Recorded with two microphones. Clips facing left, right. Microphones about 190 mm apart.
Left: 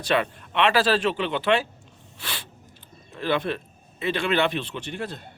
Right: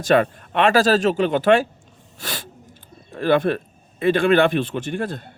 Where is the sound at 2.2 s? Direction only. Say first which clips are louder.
Right 5 dB; 45° right (ahead or behind).